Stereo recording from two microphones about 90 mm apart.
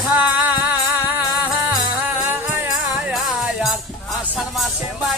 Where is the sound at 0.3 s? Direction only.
20° right (ahead or behind).